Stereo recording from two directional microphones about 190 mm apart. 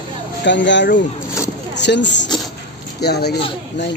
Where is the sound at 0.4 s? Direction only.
70° left (ahead or behind).